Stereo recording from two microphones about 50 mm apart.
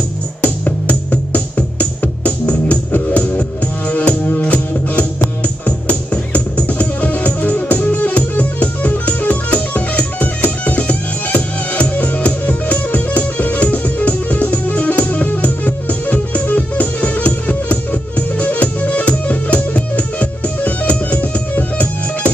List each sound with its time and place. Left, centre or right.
0.4 s music: left